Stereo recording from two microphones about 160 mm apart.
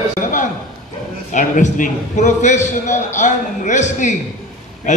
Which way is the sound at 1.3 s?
55° left (ahead or behind).